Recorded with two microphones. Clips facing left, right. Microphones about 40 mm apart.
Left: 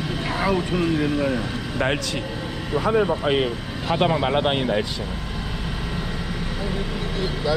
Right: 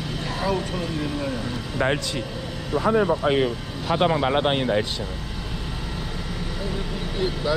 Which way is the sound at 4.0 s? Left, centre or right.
Left.